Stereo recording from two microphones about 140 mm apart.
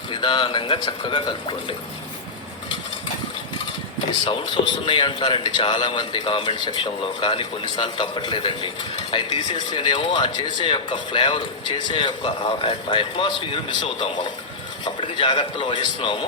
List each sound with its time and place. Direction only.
0.1 s a man's voice: 35° left (ahead or behind)
4.3 s a man's voice: 35° left (ahead or behind)